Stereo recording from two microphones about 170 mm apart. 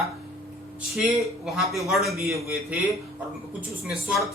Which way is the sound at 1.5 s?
Centre (ahead or behind).